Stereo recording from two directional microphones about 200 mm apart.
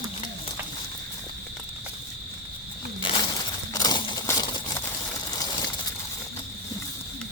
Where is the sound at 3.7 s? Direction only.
20° left (ahead or behind).